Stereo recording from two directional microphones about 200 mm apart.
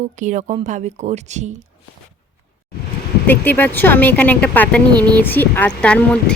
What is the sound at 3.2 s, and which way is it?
Speech, 10° left (ahead or behind).